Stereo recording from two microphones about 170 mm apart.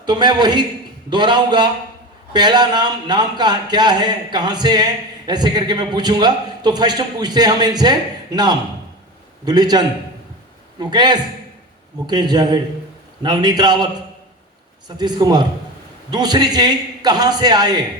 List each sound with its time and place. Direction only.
0.0 s speech: 25° right (ahead or behind)